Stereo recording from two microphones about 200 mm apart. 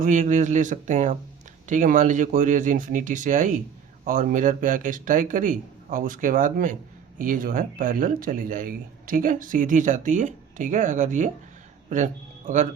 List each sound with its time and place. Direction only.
0.0 s speech: 40° right (ahead or behind)